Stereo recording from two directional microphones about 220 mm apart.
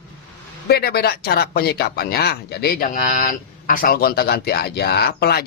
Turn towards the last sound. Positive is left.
turn(degrees=45)  # may be behind; listen again after turning